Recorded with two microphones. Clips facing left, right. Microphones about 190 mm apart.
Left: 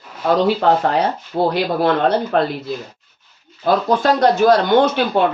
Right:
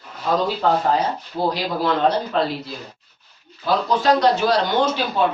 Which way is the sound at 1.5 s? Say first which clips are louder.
Left 4 dB; 55° left (ahead or behind).